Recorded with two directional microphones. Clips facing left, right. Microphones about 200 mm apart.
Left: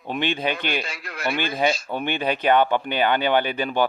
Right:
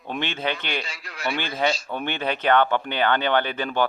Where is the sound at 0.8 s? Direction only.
55° left (ahead or behind).